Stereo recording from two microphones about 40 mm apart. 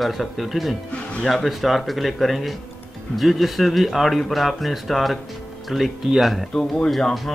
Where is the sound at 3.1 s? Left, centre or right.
Centre.